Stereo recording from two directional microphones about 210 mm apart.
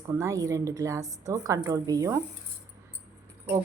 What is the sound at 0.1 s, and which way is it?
Speech, 15° right (ahead or behind).